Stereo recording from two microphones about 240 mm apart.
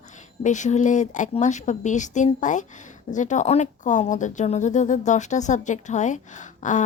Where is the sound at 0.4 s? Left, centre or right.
Left.